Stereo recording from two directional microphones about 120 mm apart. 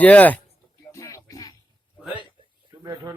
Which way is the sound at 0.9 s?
25° left (ahead or behind).